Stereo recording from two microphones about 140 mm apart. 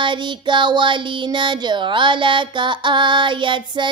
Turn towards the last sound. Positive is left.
turn(degrees=-35)  # may be behind; listen again after turning